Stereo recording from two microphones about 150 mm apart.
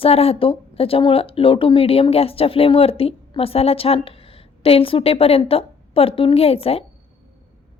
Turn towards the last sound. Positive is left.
turn(degrees=40)  # may be behind; listen again after turning